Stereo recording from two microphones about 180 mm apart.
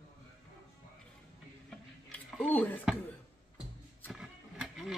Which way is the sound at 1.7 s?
Centre (ahead or behind).